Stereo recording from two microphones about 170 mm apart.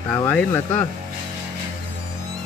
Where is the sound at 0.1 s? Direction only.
10° left (ahead or behind).